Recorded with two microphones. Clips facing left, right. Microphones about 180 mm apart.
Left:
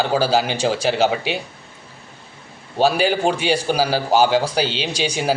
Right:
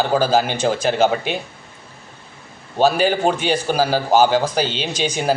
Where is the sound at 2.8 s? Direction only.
10° left (ahead or behind).